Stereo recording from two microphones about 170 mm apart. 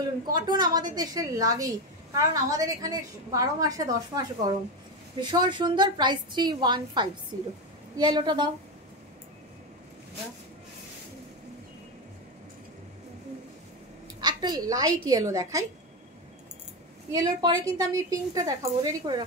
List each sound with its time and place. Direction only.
0.3 s a woman's voice: 25° right (ahead or behind)
14.2 s a woman's voice: 25° right (ahead or behind)
17.1 s a woman's voice: 20° right (ahead or behind)